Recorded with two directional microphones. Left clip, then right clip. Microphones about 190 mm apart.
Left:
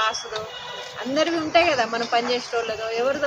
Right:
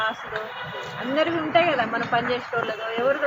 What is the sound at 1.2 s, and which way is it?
A woman's voice, 15° left (ahead or behind).